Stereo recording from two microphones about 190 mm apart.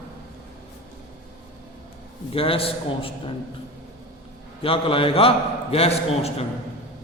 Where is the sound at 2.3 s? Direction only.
30° left (ahead or behind).